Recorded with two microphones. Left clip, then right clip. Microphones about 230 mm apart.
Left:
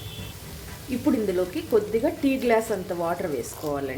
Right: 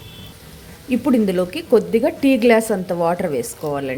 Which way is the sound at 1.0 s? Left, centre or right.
Right.